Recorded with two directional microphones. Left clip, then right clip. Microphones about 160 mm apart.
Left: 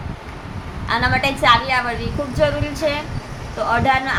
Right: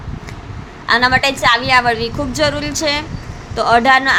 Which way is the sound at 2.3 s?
70° right (ahead or behind).